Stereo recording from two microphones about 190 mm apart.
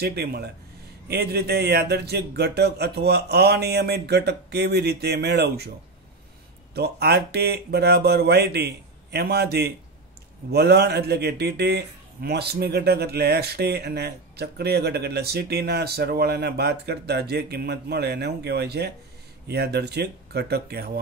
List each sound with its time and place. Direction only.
0.0 s a man's voice: 55° right (ahead or behind)
6.7 s a man's voice: 60° right (ahead or behind)